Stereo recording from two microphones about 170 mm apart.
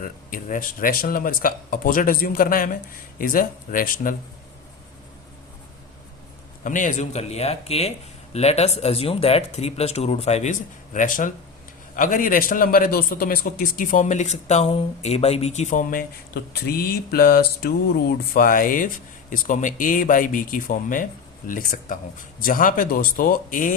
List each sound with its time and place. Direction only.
0.0 s a man's voice: 55° left (ahead or behind)
6.7 s a man's voice: 50° left (ahead or behind)